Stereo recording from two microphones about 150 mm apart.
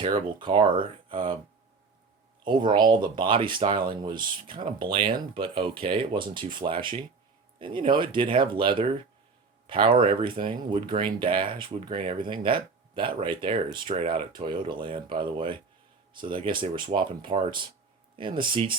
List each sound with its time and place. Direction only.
0.0 s speech: 30° right (ahead or behind)
2.4 s speech: 30° right (ahead or behind)